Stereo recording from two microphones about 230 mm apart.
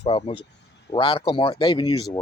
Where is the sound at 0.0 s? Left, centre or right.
Centre.